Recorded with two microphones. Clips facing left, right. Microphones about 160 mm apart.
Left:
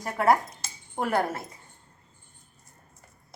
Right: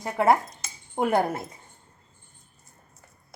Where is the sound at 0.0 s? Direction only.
20° right (ahead or behind).